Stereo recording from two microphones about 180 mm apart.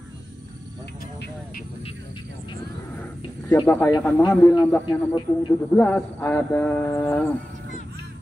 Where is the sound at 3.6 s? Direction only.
10° left (ahead or behind).